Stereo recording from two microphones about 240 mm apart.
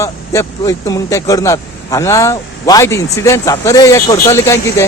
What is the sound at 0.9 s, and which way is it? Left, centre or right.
Speech, centre.